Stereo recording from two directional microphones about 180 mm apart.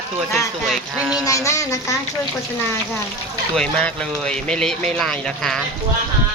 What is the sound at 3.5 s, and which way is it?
A woman's voice, 5° left (ahead or behind).